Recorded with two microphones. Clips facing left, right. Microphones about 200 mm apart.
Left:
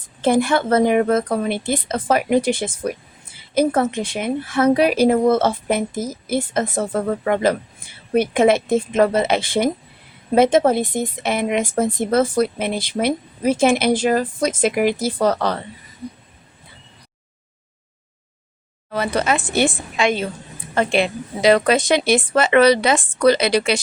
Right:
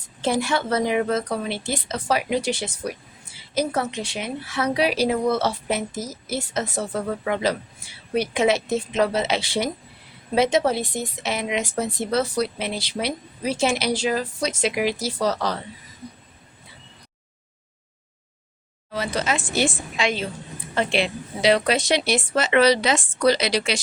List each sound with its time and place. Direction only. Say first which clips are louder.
0.2 s a woman's voice: left 6 dB; 55° left (ahead or behind)
18.9 s a woman's voice: left 5 dB; 60° left (ahead or behind)